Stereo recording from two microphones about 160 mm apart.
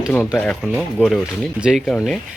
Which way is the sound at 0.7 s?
10° right (ahead or behind).